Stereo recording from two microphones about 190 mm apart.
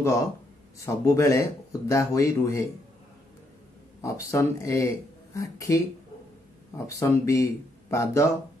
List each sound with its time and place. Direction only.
0.7 s speech: 15° left (ahead or behind)
4.0 s speech: 15° left (ahead or behind)
6.9 s speech: 15° left (ahead or behind)